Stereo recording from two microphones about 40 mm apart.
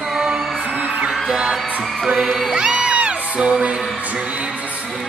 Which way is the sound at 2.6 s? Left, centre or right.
Right.